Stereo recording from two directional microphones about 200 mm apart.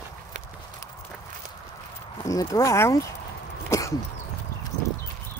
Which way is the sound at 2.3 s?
15° left (ahead or behind).